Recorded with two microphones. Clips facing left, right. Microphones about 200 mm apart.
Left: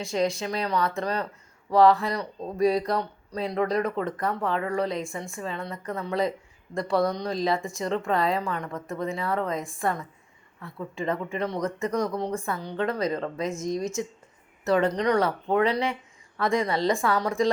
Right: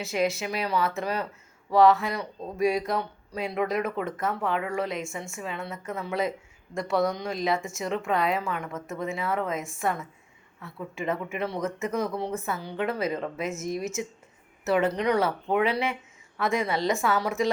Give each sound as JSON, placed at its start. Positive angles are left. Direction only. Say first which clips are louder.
{"t": 0.0, "sound": "a woman's voice", "louder": "left 1 dB", "side_deg": -5}